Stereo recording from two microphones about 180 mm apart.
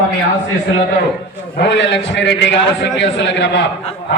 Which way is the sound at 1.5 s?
85° left.